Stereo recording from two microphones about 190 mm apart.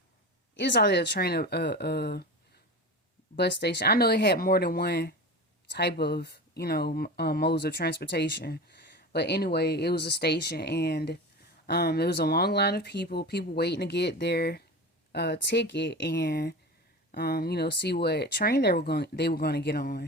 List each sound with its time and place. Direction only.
0.5 s speech: 65° left (ahead or behind)
3.3 s speech: 60° left (ahead or behind)